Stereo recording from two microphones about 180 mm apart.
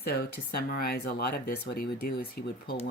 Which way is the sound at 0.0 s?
60° left (ahead or behind).